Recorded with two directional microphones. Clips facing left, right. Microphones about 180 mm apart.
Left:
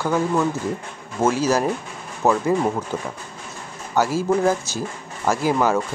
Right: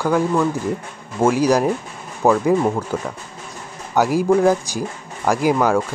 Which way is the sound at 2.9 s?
10° left (ahead or behind).